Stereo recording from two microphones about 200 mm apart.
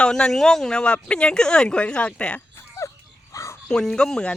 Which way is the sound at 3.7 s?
5° left (ahead or behind).